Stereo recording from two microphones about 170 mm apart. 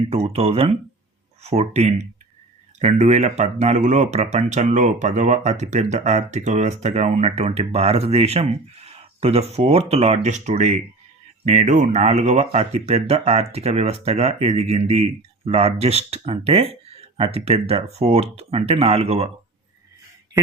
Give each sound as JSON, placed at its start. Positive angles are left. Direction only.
{"t": 0.1, "sound": "speech", "side_deg": -35}